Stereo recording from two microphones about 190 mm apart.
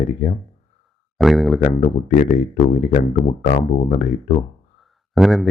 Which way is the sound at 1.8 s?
40° left (ahead or behind).